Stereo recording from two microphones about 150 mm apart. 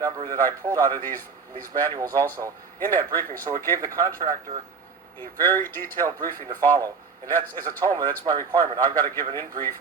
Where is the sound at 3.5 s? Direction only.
40° right (ahead or behind).